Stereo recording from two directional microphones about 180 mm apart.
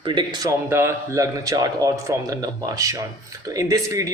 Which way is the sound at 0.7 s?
15° right (ahead or behind).